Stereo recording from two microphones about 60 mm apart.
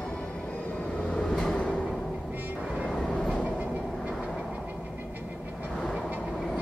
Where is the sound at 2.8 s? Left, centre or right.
Centre.